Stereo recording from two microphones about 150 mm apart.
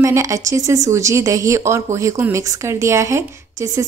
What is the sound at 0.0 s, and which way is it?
Speech, 20° right (ahead or behind).